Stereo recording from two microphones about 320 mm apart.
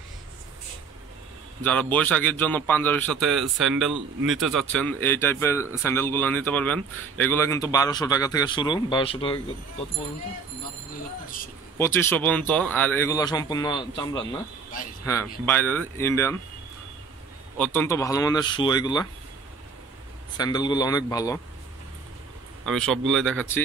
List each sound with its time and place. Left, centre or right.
1.6 s a man's voice: centre
11.2 s speech: left
11.8 s speech: centre
17.6 s speech: centre
20.3 s speech: centre
22.7 s a man's voice: centre